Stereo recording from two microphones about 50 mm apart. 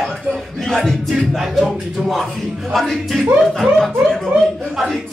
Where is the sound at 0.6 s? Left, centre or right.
Centre.